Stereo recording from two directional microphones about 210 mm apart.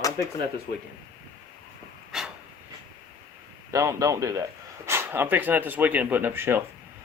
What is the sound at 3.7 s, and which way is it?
Speech, 15° right (ahead or behind).